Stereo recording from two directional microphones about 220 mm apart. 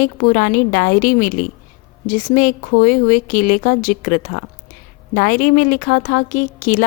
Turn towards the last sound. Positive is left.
turn(degrees=35)  # may be behind; listen again after turning